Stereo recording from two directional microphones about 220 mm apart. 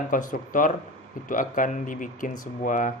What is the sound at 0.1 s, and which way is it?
Speech, 35° left (ahead or behind).